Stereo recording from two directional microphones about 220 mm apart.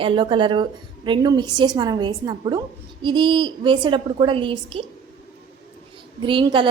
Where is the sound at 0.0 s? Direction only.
20° right (ahead or behind).